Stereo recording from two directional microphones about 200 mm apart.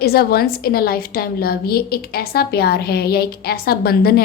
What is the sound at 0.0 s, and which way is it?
A woman's voice, 50° left (ahead or behind).